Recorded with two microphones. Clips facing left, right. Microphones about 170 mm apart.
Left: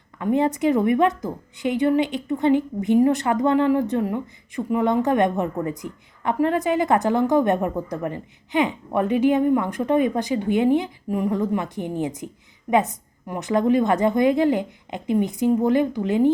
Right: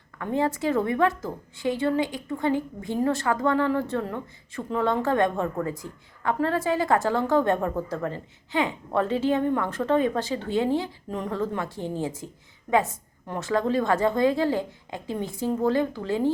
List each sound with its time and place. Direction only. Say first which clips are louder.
0.2 s a woman's voice: left 5 dB; 20° left (ahead or behind)